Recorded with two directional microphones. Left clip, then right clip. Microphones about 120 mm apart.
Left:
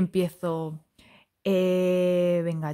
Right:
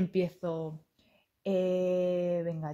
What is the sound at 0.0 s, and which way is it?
Speech, 45° left (ahead or behind).